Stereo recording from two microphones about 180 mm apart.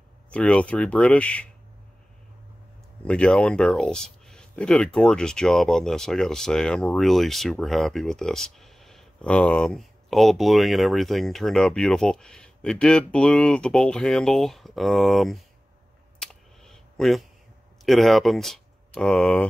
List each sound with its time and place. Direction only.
0.3 s speech: 5° left (ahead or behind)
3.1 s speech: 5° left (ahead or behind)
16.2 s computer keyboard: 5° left (ahead or behind)
17.8 s speech: centre (ahead or behind)